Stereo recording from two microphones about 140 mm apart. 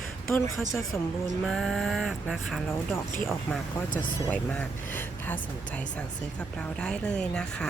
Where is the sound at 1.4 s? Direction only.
Centre (ahead or behind).